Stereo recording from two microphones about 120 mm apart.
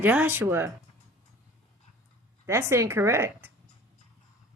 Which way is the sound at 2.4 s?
25° right (ahead or behind).